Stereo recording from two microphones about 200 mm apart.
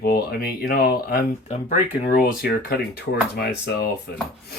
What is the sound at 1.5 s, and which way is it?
Speech, 35° left (ahead or behind).